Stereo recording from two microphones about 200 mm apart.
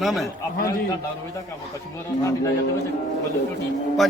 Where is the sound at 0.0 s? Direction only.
Centre (ahead or behind).